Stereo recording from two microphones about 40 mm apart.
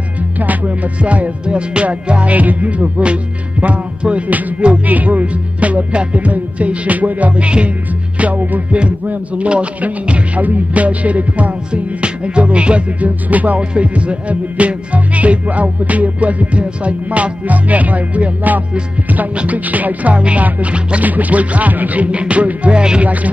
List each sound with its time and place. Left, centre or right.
0.4 s music: right
8.2 s music: right
11.7 s music: right
13.6 s music: right